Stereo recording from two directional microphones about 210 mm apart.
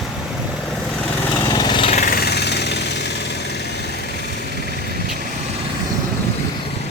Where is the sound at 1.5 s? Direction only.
20° left (ahead or behind).